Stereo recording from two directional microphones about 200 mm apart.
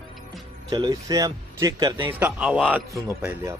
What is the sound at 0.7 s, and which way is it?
Speech, 20° right (ahead or behind).